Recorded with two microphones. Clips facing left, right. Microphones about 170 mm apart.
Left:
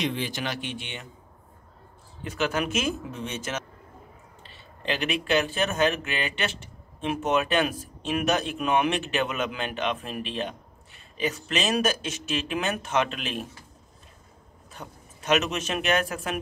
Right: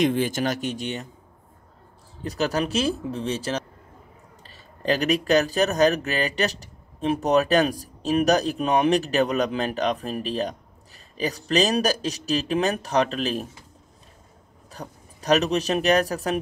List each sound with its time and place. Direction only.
0.0 s speech: 45° right (ahead or behind)
2.2 s speech: 35° right (ahead or behind)
14.7 s speech: 35° right (ahead or behind)